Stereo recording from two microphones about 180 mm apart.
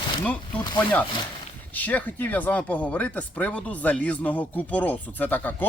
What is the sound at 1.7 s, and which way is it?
Speech, 10° left (ahead or behind).